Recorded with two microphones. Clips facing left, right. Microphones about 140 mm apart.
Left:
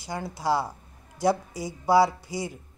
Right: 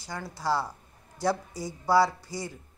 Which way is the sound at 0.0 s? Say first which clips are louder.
Left 3 dB; 15° left (ahead or behind).